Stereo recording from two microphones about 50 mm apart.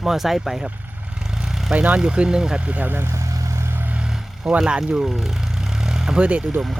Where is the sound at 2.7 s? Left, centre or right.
Right.